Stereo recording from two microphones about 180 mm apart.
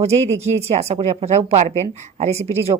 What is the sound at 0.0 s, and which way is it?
A woman's voice, 35° right (ahead or behind).